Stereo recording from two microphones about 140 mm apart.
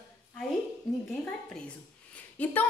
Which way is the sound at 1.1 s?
5° left (ahead or behind).